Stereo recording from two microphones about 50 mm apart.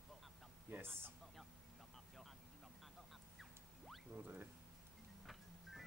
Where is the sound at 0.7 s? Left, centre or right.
Right.